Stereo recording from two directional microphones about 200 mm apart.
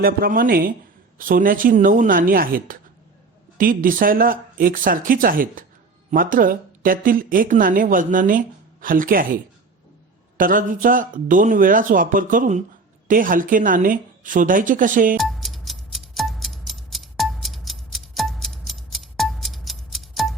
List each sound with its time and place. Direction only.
0.0 s speech: 45° right (ahead or behind)
15.2 s music: centre (ahead or behind)